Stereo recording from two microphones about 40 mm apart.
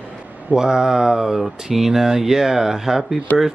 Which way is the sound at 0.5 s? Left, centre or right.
Centre.